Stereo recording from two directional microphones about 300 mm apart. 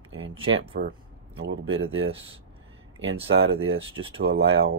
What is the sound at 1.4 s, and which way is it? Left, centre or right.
Speech, right.